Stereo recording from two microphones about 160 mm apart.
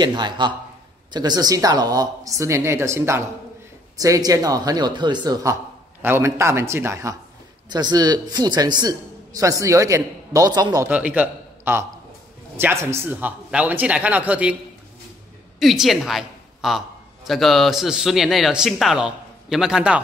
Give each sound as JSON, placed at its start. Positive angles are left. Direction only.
{"t": 0.0, "sound": "a man's voice", "side_deg": -25}
{"t": 10.9, "sound": "a man's voice", "side_deg": -10}
{"t": 15.6, "sound": "a woman's voice", "side_deg": 0}